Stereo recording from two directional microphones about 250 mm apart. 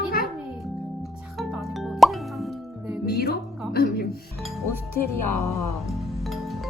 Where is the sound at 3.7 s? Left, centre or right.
Left.